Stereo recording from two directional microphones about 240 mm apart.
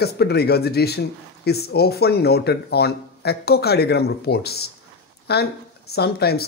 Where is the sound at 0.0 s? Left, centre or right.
Left.